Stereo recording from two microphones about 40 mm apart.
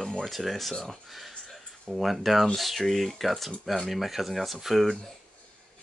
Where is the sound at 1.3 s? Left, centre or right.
Centre.